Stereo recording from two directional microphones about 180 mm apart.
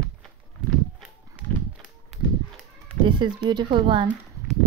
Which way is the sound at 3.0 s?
25° right (ahead or behind).